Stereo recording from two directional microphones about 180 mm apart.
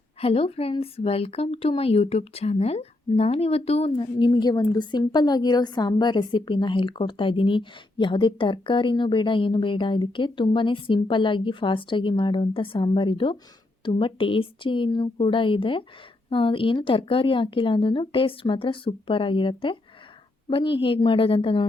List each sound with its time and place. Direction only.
0.2 s a woman's voice: 30° left (ahead or behind)